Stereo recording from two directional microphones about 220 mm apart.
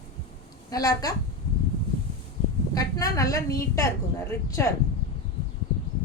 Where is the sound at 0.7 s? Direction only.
15° left (ahead or behind).